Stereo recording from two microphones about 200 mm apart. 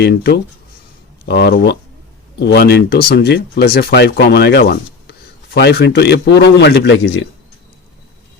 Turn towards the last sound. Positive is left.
turn(degrees=65)  # may be behind; listen again after turning